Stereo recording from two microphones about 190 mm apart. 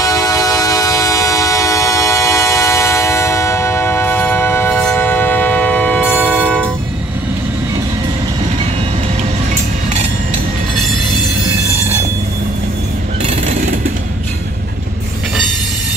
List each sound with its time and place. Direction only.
0.0 s music: 20° left (ahead or behind)
13.2 s vehicle: 35° right (ahead or behind)